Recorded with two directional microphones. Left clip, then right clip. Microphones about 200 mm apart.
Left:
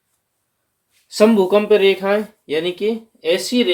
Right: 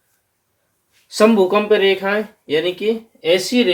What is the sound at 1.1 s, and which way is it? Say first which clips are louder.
Speech: even; 35° left (ahead or behind).